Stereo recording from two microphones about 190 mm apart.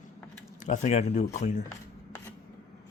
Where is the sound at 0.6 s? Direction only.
40° left (ahead or behind).